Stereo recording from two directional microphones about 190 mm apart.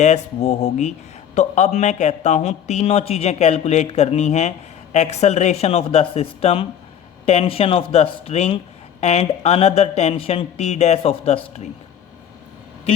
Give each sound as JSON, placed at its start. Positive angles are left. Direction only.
{"t": 0.0, "sound": "speech", "side_deg": 35}